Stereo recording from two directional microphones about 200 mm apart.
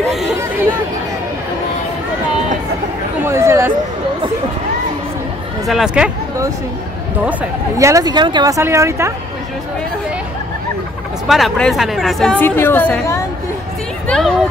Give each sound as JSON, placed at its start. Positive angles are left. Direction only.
{"t": 3.3, "sound": "a sound", "side_deg": -15}
{"t": 5.7, "sound": "a woman's voice", "side_deg": -5}
{"t": 7.2, "sound": "speech", "side_deg": -15}
{"t": 11.2, "sound": "a woman's voice", "side_deg": 0}